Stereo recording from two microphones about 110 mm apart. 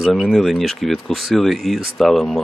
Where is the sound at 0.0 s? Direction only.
Centre (ahead or behind).